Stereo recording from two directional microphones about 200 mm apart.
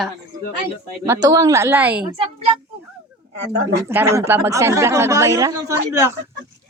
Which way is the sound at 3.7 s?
10° right (ahead or behind).